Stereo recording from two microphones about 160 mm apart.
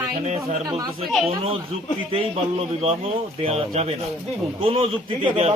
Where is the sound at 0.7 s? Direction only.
20° right (ahead or behind).